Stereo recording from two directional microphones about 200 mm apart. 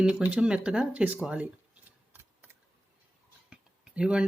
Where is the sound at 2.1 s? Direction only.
10° right (ahead or behind).